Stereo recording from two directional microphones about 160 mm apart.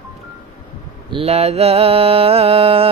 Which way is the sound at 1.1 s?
40° right (ahead or behind).